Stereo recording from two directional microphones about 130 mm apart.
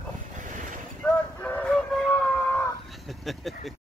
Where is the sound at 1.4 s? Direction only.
10° left (ahead or behind).